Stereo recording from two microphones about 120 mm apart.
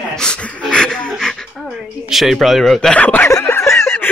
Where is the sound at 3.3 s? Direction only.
25° left (ahead or behind).